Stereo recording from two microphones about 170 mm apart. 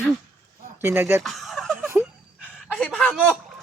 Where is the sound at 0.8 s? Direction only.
15° right (ahead or behind).